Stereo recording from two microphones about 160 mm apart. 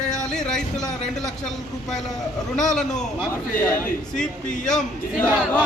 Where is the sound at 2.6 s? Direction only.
5° left (ahead or behind).